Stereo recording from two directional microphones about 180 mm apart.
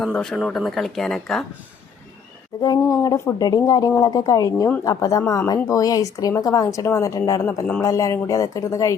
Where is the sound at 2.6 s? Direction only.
20° left (ahead or behind).